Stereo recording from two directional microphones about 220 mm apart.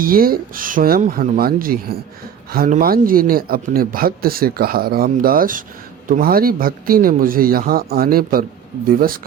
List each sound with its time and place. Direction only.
0.0 s speech: 40° right (ahead or behind)